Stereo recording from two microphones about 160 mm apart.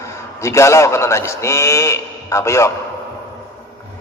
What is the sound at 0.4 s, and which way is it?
A man's voice, 20° left (ahead or behind).